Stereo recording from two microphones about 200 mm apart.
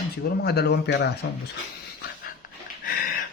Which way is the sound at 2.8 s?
45° left (ahead or behind).